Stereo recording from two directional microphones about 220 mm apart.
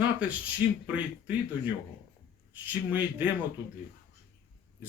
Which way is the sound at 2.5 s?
5° right (ahead or behind).